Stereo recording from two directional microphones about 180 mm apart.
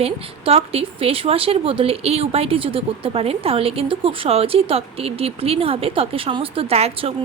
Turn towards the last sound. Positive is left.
turn(degrees=-35)  # may be behind; listen again after turning